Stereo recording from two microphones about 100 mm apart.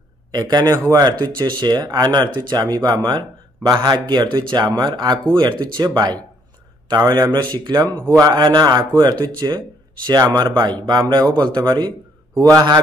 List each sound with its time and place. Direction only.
0.3 s a man's voice: 40° right (ahead or behind)
12.4 s speech: 35° right (ahead or behind)